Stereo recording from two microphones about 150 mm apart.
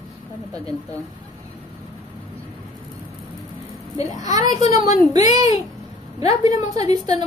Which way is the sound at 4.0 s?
25° right (ahead or behind).